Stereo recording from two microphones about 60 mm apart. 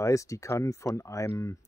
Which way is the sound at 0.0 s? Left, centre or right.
Left.